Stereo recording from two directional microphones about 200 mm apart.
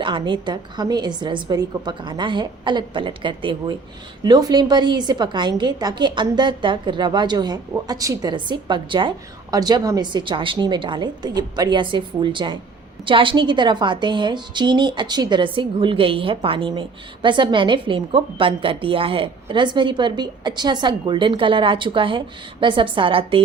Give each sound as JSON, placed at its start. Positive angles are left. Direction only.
{"t": 0.0, "sound": "a woman's voice", "side_deg": -25}